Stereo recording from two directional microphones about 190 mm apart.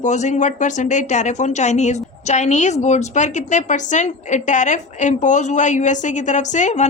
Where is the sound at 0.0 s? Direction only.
40° left (ahead or behind).